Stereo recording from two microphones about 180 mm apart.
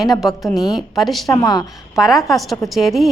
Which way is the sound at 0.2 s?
Centre (ahead or behind).